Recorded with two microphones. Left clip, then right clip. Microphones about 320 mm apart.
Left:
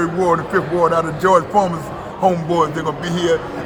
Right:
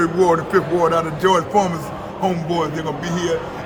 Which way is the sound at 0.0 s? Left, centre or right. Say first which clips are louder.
Right 1 dB; centre.